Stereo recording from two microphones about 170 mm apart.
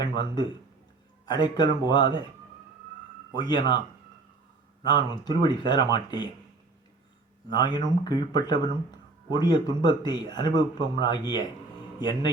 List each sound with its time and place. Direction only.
1.2 s speech: 25° left (ahead or behind)
3.3 s speech: 25° left (ahead or behind)
4.8 s speech: 25° left (ahead or behind)
7.5 s speech: 25° left (ahead or behind)